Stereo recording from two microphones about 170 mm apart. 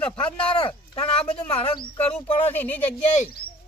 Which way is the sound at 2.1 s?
10° left (ahead or behind).